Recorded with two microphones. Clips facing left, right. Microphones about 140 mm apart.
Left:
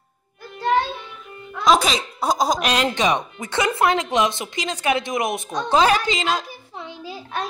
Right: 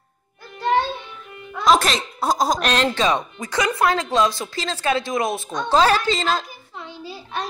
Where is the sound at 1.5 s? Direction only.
Centre (ahead or behind).